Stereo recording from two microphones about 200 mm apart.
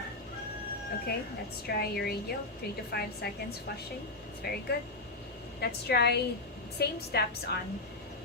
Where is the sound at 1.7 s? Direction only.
50° left (ahead or behind).